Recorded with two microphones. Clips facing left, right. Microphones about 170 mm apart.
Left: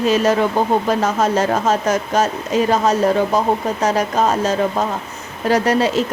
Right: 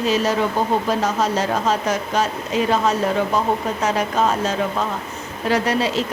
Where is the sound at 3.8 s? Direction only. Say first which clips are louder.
Left 2 dB; 40° left (ahead or behind).